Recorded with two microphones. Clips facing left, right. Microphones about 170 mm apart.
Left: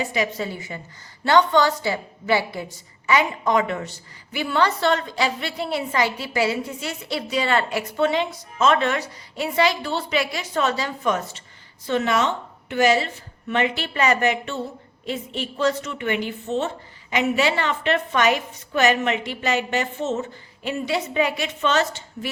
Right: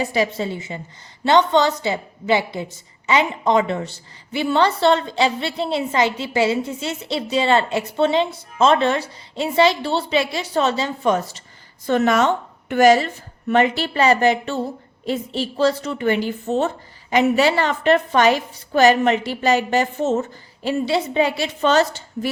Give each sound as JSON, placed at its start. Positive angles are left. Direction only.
{"t": 0.0, "sound": "a woman's voice", "side_deg": -30}
{"t": 11.9, "sound": "a woman's voice", "side_deg": -45}